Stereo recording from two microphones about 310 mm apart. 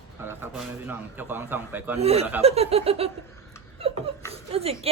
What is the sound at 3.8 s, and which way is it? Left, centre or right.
Chuckle, centre.